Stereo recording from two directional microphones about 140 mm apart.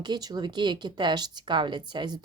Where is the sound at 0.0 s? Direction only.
30° right (ahead or behind).